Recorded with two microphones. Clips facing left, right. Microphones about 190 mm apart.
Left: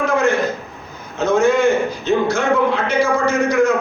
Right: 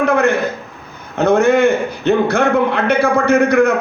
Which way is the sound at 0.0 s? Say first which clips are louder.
Right 2 dB; 60° right (ahead or behind).